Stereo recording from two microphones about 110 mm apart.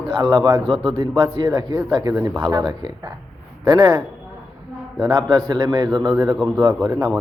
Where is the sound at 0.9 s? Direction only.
40° right (ahead or behind).